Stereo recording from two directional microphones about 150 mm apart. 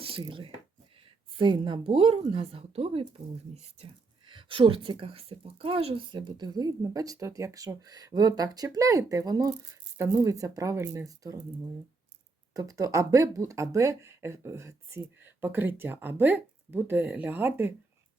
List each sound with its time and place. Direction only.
0.0 s speech: 35° right (ahead or behind)
12.5 s speech: 25° right (ahead or behind)